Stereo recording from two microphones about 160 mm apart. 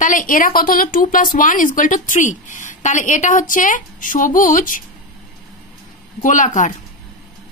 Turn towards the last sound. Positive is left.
turn(degrees=50)  # may be behind; listen again after turning